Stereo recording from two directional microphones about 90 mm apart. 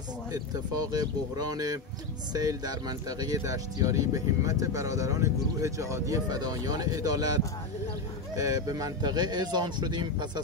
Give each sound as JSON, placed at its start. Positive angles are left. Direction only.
{"t": 0.3, "sound": "speech", "side_deg": -45}